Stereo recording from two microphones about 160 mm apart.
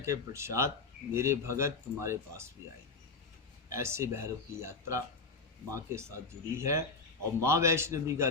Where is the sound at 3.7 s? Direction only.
15° right (ahead or behind).